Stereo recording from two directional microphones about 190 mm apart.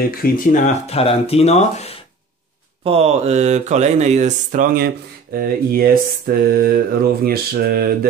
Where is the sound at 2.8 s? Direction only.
30° right (ahead or behind).